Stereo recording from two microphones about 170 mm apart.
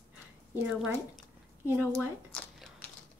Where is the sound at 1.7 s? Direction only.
5° left (ahead or behind).